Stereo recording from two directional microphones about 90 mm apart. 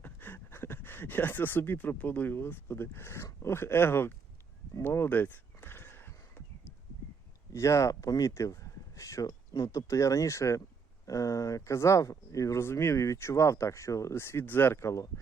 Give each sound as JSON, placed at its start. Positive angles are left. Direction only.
{"t": 0.0, "sound": "speech", "side_deg": 20}
{"t": 4.8, "sound": "a sound", "side_deg": 25}
{"t": 7.5, "sound": "speech", "side_deg": 35}